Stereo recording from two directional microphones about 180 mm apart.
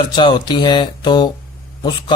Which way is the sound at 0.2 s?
25° left (ahead or behind).